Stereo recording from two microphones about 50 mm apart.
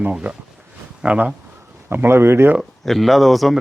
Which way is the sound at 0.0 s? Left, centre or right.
Right.